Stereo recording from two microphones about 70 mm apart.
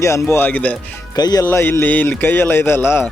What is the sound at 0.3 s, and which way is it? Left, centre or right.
Speech, left.